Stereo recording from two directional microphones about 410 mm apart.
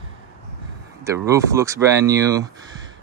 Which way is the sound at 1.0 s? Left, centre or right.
Centre.